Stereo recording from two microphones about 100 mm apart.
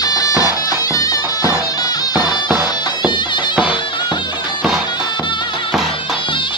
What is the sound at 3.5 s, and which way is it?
Music, 10° right (ahead or behind).